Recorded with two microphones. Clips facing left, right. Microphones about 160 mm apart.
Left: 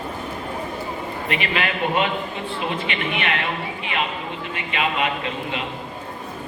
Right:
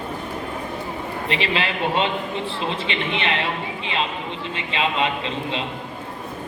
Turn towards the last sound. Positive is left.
turn(degrees=-25)  # may be behind; listen again after turning